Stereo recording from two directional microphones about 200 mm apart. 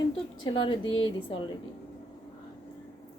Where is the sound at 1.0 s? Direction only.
25° left (ahead or behind).